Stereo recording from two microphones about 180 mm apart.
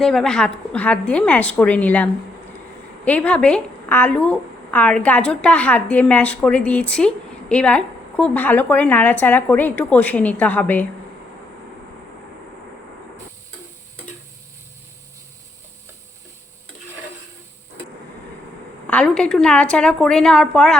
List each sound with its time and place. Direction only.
0.0 s a woman's voice: centre (ahead or behind)
18.9 s a woman's voice: 5° left (ahead or behind)